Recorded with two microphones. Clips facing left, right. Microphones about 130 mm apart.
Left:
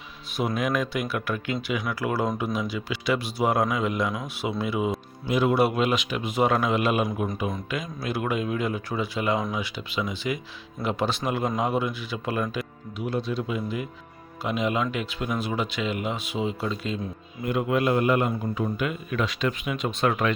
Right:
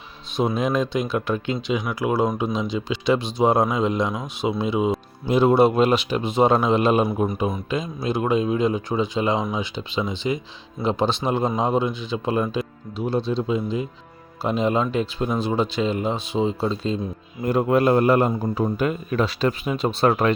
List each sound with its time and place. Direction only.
0.3 s a man's voice: 25° right (ahead or behind)